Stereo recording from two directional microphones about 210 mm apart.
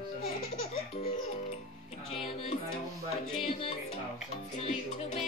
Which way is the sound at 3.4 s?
30° left (ahead or behind).